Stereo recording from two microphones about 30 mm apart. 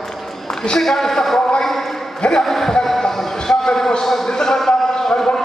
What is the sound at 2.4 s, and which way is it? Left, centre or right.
Speech, centre.